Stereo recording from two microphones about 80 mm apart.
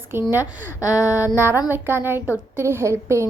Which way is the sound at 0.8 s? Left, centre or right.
Left.